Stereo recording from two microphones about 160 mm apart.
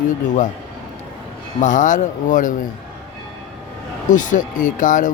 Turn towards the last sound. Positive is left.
turn(degrees=55)  # may be behind; listen again after turning